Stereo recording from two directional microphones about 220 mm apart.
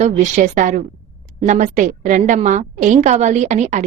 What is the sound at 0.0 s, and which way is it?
A woman's voice, 30° right (ahead or behind).